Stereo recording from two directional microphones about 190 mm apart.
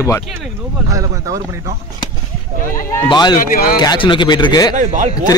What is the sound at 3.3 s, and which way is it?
Speech, 50° left (ahead or behind).